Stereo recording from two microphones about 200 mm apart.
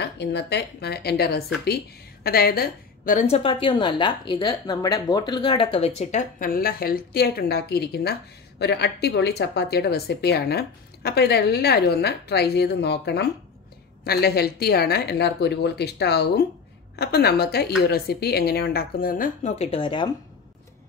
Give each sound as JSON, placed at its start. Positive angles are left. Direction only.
{"t": 0.0, "sound": "a woman's voice", "side_deg": 55}